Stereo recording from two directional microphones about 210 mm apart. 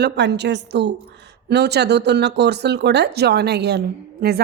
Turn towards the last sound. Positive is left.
turn(degrees=-50)  # may be behind; listen again after turning